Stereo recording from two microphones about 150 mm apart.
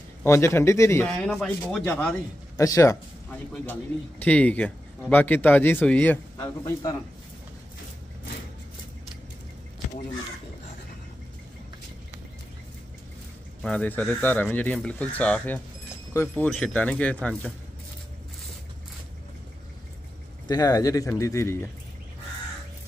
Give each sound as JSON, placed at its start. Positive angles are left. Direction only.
{"t": 0.2, "sound": "speech", "side_deg": 15}
{"t": 2.5, "sound": "a man's voice", "side_deg": 20}
{"t": 4.2, "sound": "speech", "side_deg": 10}
{"t": 6.3, "sound": "speech", "side_deg": 25}
{"t": 13.6, "sound": "speech", "side_deg": 5}
{"t": 20.4, "sound": "speech", "side_deg": 25}